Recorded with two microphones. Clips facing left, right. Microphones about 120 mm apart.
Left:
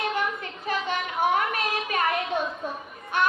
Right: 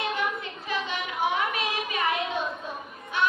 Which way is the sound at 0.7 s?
50° left (ahead or behind).